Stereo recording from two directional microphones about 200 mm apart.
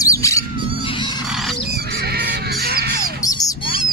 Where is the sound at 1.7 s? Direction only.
55° right (ahead or behind).